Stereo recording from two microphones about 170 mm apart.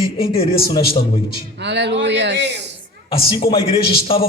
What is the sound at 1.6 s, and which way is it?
Speech, 90° right.